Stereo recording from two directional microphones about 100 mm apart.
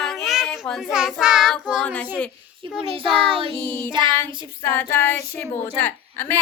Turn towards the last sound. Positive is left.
turn(degrees=20)  # may be behind; listen again after turning